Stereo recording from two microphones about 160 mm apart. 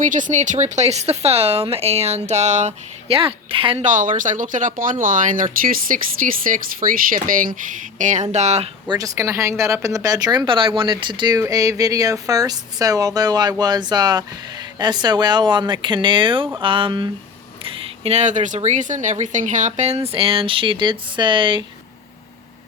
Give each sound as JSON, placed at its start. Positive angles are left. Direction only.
{"t": 0.0, "sound": "speech", "side_deg": -55}
{"t": 3.8, "sound": "speech", "side_deg": -55}
{"t": 8.9, "sound": "speech", "side_deg": -20}